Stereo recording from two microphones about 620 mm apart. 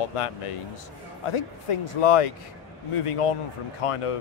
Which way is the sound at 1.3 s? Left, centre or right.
Left.